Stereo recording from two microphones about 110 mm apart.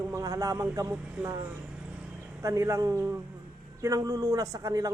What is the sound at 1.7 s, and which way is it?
Vehicle, 10° right (ahead or behind).